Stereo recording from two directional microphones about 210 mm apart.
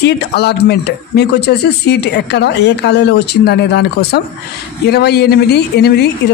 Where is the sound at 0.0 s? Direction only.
55° left (ahead or behind).